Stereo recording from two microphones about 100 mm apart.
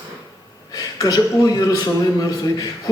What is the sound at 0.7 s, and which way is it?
A man's voice, 35° left (ahead or behind).